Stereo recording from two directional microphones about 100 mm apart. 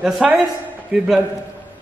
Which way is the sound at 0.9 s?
5° right (ahead or behind).